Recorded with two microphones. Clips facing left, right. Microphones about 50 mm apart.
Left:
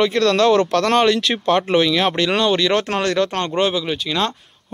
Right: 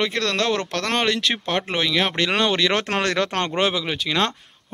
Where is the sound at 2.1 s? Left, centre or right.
Right.